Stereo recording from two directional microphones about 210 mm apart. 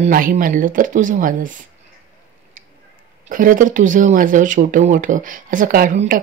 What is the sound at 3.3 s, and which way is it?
Speech, 40° right (ahead or behind).